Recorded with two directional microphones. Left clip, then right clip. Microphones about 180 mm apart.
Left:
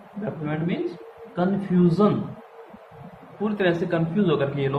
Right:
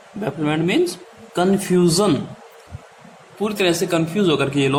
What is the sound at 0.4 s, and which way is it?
Speech, 60° right (ahead or behind).